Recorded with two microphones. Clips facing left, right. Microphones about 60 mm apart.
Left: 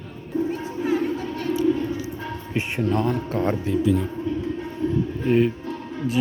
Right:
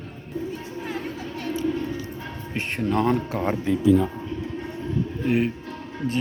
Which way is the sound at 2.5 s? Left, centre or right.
Centre.